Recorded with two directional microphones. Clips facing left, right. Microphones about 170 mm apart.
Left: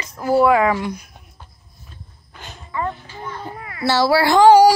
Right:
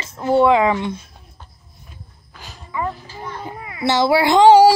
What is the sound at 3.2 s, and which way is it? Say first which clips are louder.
Child singing: right 1 dB; 10° right (ahead or behind).